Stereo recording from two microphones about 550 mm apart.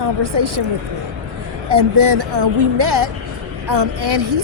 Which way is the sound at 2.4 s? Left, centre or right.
Right.